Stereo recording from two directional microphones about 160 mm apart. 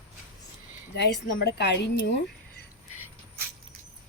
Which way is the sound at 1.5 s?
90° left.